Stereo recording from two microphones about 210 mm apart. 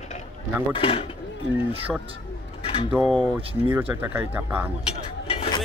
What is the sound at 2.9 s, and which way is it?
Speech, centre (ahead or behind).